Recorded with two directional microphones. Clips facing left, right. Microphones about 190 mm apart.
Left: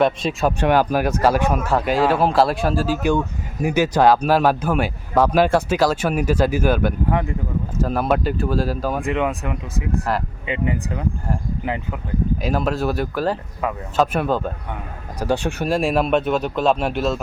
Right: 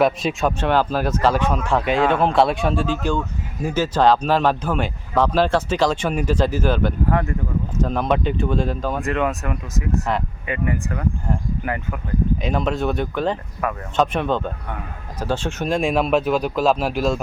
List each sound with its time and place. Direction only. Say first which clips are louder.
0.0 s speech: even; centre (ahead or behind)
0.6 s speech: left 3 dB; 10° left (ahead or behind)
10.1 s speech: left 1 dB; 5° left (ahead or behind)
10.4 s speech: left 1 dB; 20° left (ahead or behind)
12.4 s speech: left 1 dB; 5° left (ahead or behind)